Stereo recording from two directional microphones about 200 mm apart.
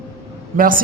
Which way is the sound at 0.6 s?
45° right (ahead or behind).